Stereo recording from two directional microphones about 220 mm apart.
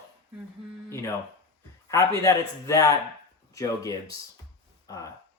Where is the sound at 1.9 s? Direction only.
15° left (ahead or behind).